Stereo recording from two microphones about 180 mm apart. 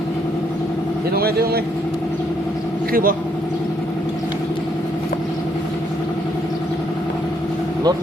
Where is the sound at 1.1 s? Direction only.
60° right (ahead or behind).